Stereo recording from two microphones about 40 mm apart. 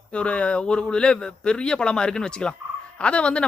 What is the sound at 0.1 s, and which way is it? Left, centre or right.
Speech, left.